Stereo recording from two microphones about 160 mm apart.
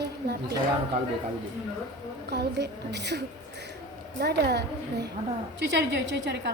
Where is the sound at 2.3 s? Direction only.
90° right.